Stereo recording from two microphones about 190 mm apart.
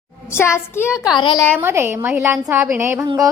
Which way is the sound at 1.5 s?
10° right (ahead or behind).